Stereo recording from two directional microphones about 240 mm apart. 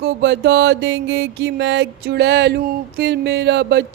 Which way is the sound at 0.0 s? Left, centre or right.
Right.